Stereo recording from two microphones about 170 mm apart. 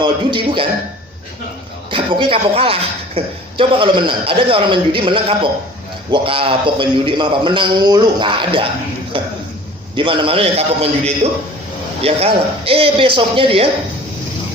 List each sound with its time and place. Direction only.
0.0 s a man's voice: 30° right (ahead or behind)
1.9 s a man's voice: 30° right (ahead or behind)
9.9 s speech: 30° right (ahead or behind)